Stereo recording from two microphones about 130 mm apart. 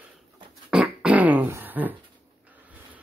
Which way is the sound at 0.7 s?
5° right (ahead or behind).